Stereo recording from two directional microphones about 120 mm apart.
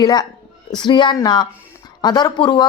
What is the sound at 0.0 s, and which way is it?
Speech, 35° left (ahead or behind).